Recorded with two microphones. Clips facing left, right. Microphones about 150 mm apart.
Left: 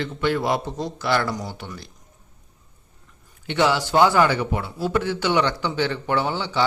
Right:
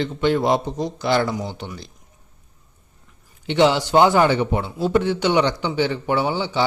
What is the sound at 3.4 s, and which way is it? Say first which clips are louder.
Speech: right 4 dB; 20° right (ahead or behind).